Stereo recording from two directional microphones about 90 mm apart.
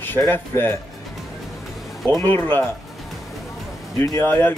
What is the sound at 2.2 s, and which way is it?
Speech, 20° left (ahead or behind).